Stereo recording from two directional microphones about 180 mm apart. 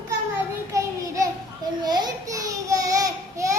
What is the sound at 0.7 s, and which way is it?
Child singing, 15° right (ahead or behind).